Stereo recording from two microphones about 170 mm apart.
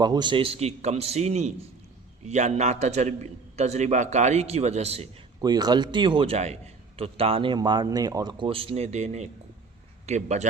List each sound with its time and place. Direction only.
0.0 s a man's voice: 25° right (ahead or behind)
5.4 s a man's voice: 25° right (ahead or behind); by 10.4 s 40° right (ahead or behind)